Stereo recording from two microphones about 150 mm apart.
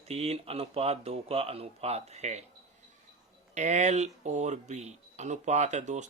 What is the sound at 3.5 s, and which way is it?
Speech, 50° right (ahead or behind).